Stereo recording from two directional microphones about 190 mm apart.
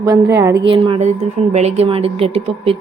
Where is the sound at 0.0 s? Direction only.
15° right (ahead or behind).